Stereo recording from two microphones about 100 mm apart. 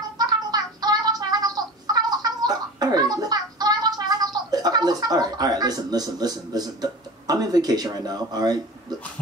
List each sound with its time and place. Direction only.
0.2 s music: 40° right (ahead or behind)